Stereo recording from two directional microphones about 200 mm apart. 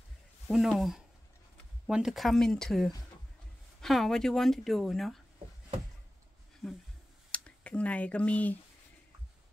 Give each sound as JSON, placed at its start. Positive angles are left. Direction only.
{"t": 0.5, "sound": "speech", "side_deg": 0}
{"t": 6.6, "sound": "speech", "side_deg": 0}